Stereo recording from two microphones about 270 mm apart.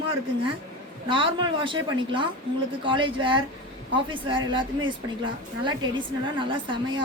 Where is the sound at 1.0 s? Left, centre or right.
Centre.